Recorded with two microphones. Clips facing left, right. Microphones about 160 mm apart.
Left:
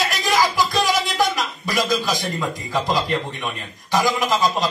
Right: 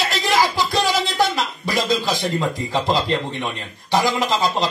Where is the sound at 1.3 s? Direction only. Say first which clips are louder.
Right 1 dB; 25° right (ahead or behind).